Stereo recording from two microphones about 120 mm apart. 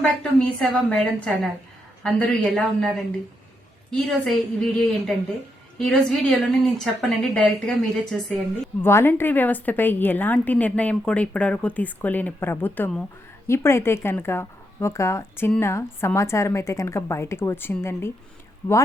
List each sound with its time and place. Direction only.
0.0 s a woman's voice: 5° left (ahead or behind)
4.1 s a woman's voice: centre (ahead or behind)
8.8 s a woman's voice: 20° left (ahead or behind)